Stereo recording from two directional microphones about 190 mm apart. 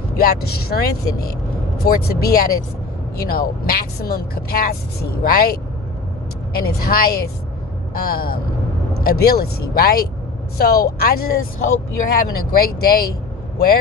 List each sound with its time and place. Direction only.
0.2 s speech: 55° left (ahead or behind)